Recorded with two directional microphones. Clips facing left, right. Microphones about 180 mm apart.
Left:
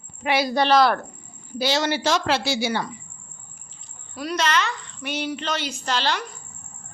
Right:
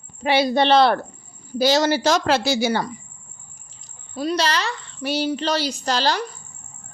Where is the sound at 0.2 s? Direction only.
30° right (ahead or behind).